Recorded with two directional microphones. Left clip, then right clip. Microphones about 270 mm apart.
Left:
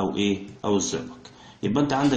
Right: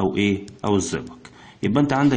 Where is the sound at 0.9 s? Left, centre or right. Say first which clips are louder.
Right 1 dB; right.